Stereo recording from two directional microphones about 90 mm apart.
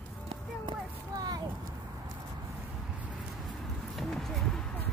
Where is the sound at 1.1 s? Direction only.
45° right (ahead or behind).